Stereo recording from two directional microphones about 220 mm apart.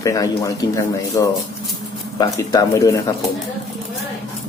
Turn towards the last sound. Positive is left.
turn(degrees=15)  # may be behind; listen again after turning